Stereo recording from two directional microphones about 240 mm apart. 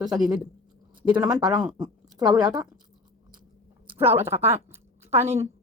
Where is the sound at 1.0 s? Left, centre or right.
Centre.